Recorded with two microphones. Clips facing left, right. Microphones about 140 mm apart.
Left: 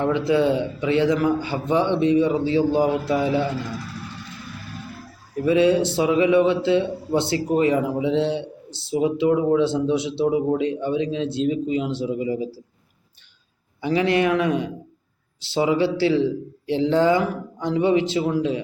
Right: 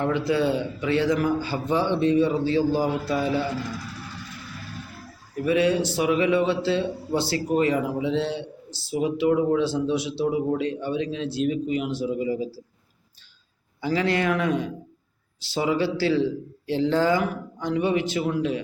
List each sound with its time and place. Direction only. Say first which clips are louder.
0.0 s a man's voice: left 3 dB; 20° left (ahead or behind)
5.5 s a man's voice: left 4 dB; 25° left (ahead or behind)
13.8 s a man's voice: left 3 dB; 20° left (ahead or behind)